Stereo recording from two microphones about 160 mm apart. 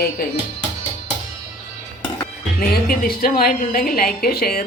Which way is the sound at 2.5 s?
65° left (ahead or behind).